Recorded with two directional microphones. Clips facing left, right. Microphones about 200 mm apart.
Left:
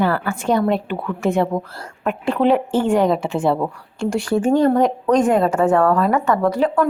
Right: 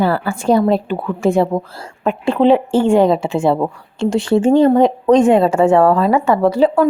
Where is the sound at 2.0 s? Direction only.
30° right (ahead or behind).